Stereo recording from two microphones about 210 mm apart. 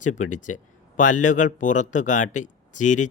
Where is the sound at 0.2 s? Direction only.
35° left (ahead or behind).